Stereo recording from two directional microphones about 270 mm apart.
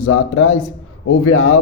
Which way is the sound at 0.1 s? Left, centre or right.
Left.